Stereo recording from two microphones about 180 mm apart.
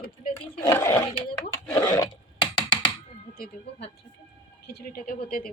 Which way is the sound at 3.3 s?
55° left (ahead or behind).